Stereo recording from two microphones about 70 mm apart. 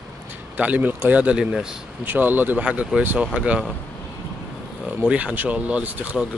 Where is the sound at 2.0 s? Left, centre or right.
Right.